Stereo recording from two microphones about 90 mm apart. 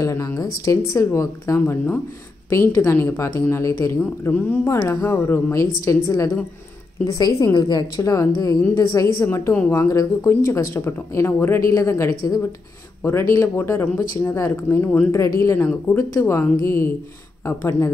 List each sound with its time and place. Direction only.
0.0 s speech: 35° left (ahead or behind)
4.3 s speech: 20° left (ahead or behind)
4.8 s a woman's voice: 35° left (ahead or behind); by 7.8 s 50° left (ahead or behind)
8.0 s speech: 40° left (ahead or behind); by 15.0 s 25° left (ahead or behind)
15.0 s speech: 35° left (ahead or behind)